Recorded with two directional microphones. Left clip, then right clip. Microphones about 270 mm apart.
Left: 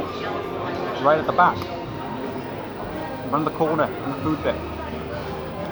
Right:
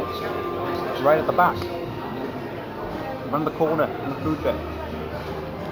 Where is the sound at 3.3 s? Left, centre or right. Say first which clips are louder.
Left 1 dB; centre.